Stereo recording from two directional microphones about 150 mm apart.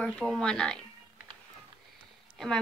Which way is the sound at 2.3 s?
Centre (ahead or behind).